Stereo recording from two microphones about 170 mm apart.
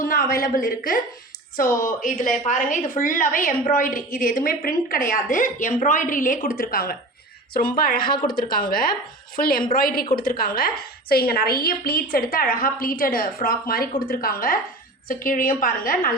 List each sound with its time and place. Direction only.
0.0 s a woman's voice: 55° left (ahead or behind)